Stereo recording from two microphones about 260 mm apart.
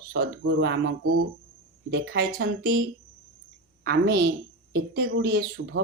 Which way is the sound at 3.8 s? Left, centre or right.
Right.